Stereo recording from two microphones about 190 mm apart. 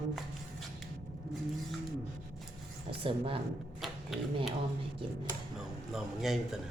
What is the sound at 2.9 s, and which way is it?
Speech, 25° right (ahead or behind).